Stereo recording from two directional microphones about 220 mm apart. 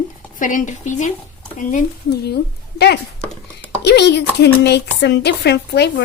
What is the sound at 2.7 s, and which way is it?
Speech, 50° left (ahead or behind).